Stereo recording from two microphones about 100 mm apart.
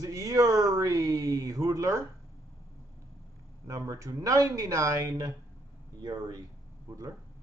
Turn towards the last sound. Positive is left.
turn(degrees=-40)  # may be behind; listen again after turning